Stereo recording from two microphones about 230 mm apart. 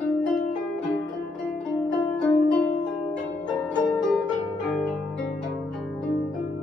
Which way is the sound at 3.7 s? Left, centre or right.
Centre.